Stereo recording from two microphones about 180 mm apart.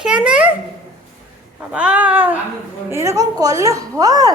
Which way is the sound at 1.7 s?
5° right (ahead or behind).